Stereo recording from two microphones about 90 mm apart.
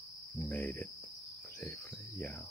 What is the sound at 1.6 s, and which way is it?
Cricket, 20° left (ahead or behind).